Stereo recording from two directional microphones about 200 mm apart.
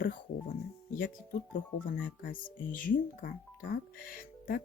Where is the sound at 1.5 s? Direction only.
40° left (ahead or behind).